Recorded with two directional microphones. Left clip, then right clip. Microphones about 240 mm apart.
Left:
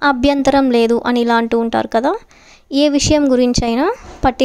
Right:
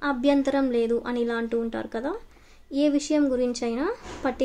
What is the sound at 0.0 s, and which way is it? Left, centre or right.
A woman's voice, left.